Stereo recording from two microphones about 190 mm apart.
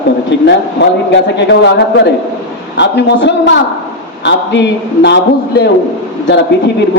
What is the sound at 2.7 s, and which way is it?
A man's voice, 65° left (ahead or behind).